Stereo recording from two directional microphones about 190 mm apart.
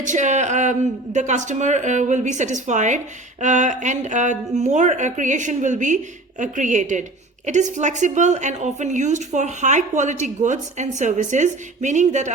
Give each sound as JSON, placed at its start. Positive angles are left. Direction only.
{"t": 0.0, "sound": "a woman's voice", "side_deg": -40}